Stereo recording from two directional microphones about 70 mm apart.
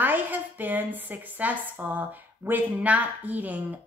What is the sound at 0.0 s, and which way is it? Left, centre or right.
A woman's voice, right.